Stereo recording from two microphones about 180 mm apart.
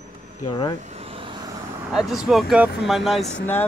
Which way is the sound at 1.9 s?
Centre (ahead or behind).